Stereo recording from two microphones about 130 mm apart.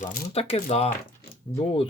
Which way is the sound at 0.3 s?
50° left (ahead or behind).